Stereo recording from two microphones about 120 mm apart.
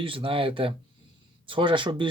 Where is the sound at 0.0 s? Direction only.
45° right (ahead or behind).